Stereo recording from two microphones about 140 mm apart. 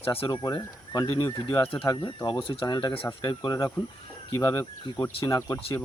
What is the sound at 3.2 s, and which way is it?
Speech, 25° left (ahead or behind).